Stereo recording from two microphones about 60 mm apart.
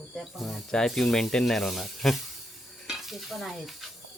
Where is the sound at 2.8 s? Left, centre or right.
Centre.